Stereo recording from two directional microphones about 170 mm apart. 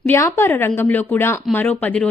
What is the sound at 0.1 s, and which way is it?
Speech, 15° left (ahead or behind).